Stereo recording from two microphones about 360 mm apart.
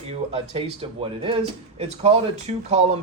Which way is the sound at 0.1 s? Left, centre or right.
Centre.